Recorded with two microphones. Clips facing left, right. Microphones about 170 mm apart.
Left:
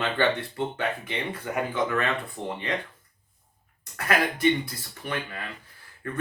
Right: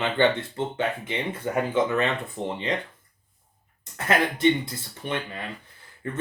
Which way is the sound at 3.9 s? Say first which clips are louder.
Right 2 dB; 25° right (ahead or behind).